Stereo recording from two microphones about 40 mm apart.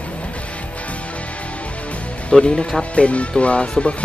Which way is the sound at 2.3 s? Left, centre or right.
Centre.